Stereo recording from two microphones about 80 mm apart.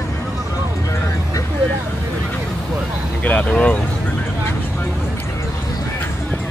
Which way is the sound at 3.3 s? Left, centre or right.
Centre.